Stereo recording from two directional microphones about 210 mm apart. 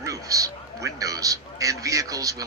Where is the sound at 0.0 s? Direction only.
15° right (ahead or behind).